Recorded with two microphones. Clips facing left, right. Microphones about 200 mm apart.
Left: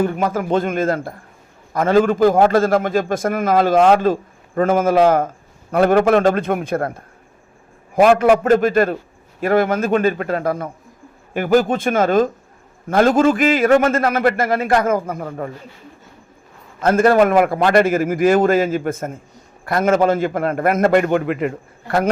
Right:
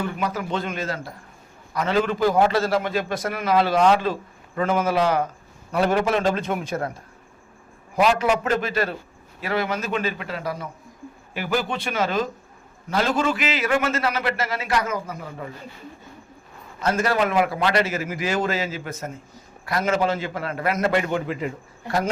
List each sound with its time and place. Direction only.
0.0 s a man's voice: 50° left (ahead or behind)
16.8 s a man's voice: 50° left (ahead or behind)